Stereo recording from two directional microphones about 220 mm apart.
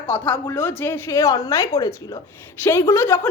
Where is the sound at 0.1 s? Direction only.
10° left (ahead or behind).